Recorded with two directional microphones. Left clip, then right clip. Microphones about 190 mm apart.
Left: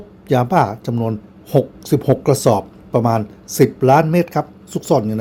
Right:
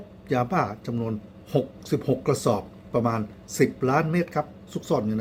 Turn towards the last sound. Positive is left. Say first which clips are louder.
# left 9 dB
turn(degrees=30)  # may be behind; listen again after turning